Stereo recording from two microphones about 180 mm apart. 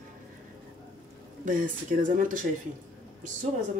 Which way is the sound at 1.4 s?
45° right (ahead or behind).